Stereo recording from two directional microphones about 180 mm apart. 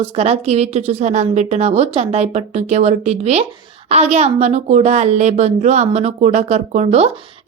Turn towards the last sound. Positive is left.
turn(degrees=-35)  # may be behind; listen again after turning